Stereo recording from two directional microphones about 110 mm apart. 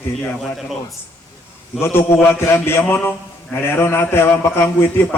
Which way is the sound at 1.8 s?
20° left (ahead or behind).